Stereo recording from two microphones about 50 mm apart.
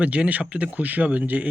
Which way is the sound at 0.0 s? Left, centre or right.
Right.